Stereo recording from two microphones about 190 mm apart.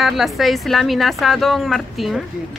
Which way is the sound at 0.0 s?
Centre (ahead or behind).